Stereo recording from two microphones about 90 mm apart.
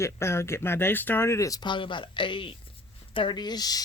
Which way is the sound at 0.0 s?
30° left (ahead or behind).